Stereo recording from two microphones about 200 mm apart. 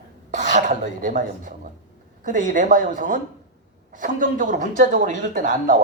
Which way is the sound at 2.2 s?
40° right (ahead or behind).